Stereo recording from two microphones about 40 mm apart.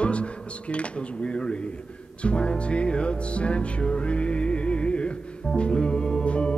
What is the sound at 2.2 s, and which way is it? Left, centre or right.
Music, left.